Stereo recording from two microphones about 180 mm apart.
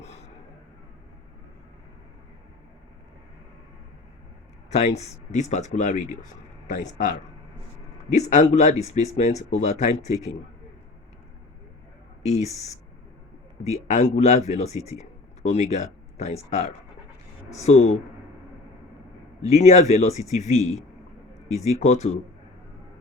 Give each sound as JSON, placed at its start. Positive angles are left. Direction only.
{"t": 4.7, "sound": "speech", "side_deg": 35}
{"t": 12.2, "sound": "speech", "side_deg": 40}
{"t": 19.5, "sound": "speech", "side_deg": 40}